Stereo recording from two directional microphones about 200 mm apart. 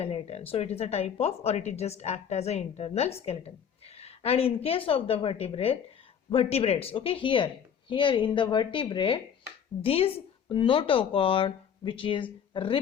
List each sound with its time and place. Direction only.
0.0 s speech: 30° left (ahead or behind)